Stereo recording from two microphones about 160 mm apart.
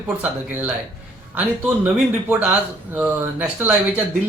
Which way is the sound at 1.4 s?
10° right (ahead or behind).